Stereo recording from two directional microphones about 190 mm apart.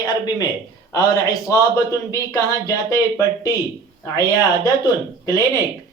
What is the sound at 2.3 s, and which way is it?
Speech, 15° left (ahead or behind).